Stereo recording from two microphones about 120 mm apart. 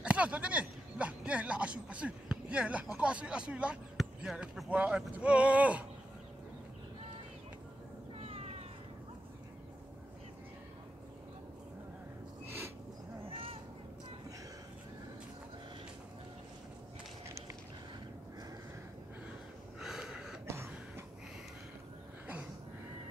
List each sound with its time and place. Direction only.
0.0 s speech: 10° right (ahead or behind)
8.2 s cat: 60° right (ahead or behind)
12.4 s a sound: 20° right (ahead or behind)
13.3 s a sound: 50° right (ahead or behind)
19.8 s gasp: 5° right (ahead or behind)
20.4 s throat clearing: 20° right (ahead or behind)